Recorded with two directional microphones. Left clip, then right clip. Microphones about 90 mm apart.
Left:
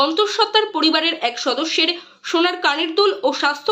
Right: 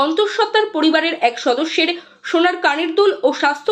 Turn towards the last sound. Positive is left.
turn(degrees=-30)  # may be behind; listen again after turning